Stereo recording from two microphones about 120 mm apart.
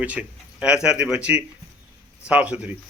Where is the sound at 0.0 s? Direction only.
10° right (ahead or behind).